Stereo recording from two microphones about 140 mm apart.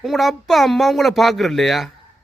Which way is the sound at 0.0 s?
Centre (ahead or behind).